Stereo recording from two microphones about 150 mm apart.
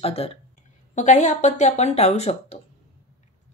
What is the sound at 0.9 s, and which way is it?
Speech, 55° left (ahead or behind).